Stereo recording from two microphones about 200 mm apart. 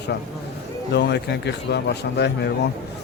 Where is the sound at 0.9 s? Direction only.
55° left (ahead or behind).